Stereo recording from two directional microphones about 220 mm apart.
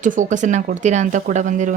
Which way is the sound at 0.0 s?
35° right (ahead or behind).